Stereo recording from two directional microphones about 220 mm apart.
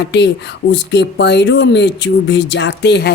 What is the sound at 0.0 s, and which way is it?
Speech, 50° left (ahead or behind).